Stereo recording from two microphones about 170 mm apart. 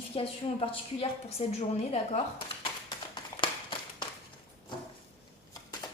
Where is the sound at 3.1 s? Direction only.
30° left (ahead or behind).